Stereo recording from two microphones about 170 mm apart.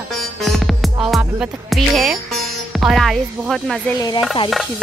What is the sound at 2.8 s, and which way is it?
Music, centre (ahead or behind).